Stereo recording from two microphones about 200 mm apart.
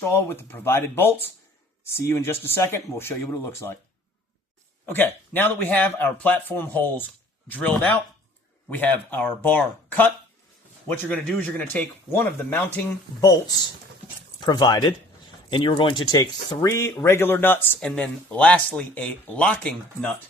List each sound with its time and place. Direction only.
0.0 s speech: 10° left (ahead or behind)
4.9 s speech: 10° left (ahead or behind)
14.4 s speech: 20° left (ahead or behind)